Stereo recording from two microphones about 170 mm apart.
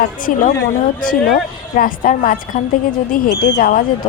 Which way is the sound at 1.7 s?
55° left (ahead or behind).